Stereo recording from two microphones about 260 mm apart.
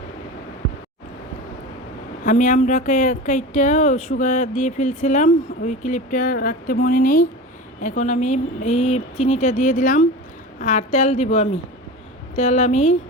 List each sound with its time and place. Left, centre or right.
2.2 s speech: left